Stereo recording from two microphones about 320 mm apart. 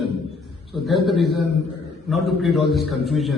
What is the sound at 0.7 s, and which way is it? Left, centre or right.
A man's voice, centre.